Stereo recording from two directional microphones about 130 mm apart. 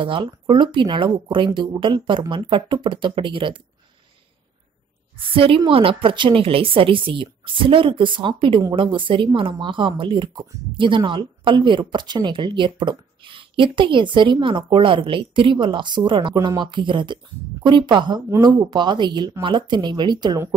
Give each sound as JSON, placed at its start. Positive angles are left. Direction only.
{"t": 0.0, "sound": "speech", "side_deg": -40}
{"t": 5.3, "sound": "a woman's voice", "side_deg": -45}